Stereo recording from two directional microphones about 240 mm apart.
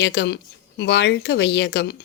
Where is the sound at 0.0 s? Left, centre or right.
Left.